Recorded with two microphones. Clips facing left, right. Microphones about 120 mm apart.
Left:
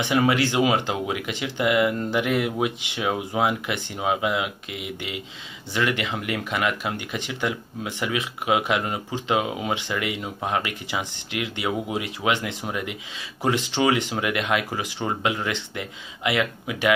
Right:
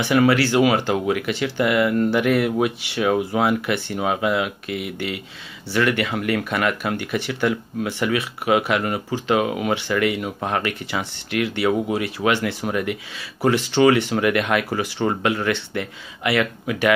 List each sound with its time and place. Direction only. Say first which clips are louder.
0.0 s speech: right 4 dB; 20° left (ahead or behind)